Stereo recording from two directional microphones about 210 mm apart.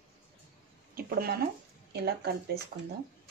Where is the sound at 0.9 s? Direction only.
45° right (ahead or behind).